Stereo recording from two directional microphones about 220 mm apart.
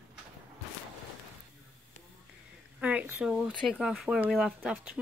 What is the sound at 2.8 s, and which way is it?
Speech, 5° right (ahead or behind).